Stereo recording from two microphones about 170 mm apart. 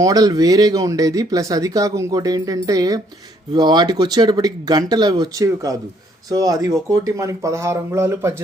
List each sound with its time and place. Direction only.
0.0 s speech: 20° right (ahead or behind)